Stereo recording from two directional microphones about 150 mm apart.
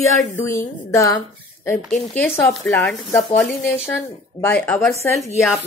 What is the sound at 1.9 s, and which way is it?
Speech, 5° left (ahead or behind).